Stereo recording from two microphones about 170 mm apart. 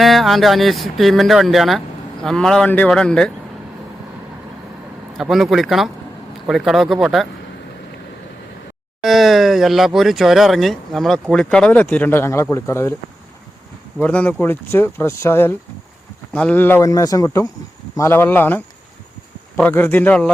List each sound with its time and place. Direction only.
0.0 s speech: centre (ahead or behind)
5.1 s speech: centre (ahead or behind)
9.0 s speech: centre (ahead or behind); by 12.9 s 15° left (ahead or behind)
14.0 s speech: 10° left (ahead or behind)